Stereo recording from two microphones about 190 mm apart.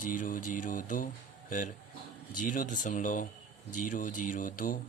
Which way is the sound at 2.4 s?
45° left (ahead or behind).